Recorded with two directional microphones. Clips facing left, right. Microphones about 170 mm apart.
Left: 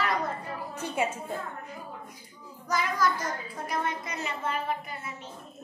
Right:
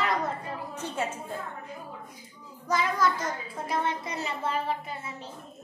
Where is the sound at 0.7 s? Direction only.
10° left (ahead or behind).